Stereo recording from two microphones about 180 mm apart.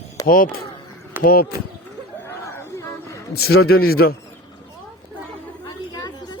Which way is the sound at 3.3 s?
60° left (ahead or behind).